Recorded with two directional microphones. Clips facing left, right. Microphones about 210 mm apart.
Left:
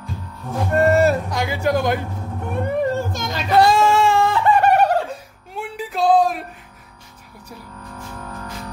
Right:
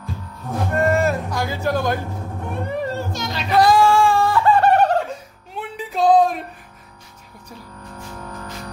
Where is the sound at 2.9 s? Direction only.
50° left (ahead or behind).